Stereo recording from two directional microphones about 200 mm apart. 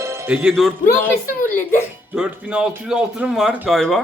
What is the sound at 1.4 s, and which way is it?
Speech, 40° left (ahead or behind).